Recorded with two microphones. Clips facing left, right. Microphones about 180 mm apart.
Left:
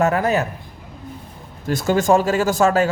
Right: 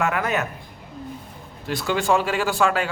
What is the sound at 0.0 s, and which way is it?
Speech, 40° left (ahead or behind).